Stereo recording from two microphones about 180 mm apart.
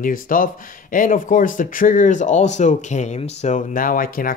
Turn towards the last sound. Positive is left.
turn(degrees=50)  # may be behind; listen again after turning